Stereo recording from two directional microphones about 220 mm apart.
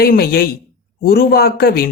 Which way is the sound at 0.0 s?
45° left (ahead or behind).